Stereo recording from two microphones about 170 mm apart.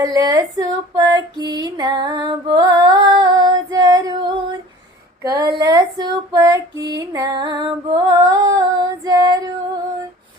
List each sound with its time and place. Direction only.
0.0 s female singing: 20° right (ahead or behind)
5.2 s speech: 20° right (ahead or behind)
5.5 s female singing: 25° right (ahead or behind)